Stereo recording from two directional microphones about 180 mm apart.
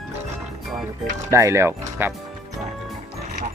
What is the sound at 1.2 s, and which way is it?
Speech, 15° right (ahead or behind).